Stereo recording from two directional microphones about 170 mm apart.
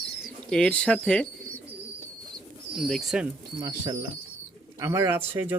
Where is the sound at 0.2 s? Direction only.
5° left (ahead or behind).